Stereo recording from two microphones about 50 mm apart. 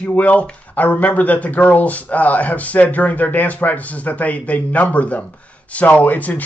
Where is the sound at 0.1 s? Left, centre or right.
Left.